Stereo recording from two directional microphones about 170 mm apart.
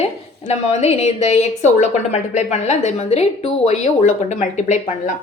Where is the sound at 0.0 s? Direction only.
40° left (ahead or behind).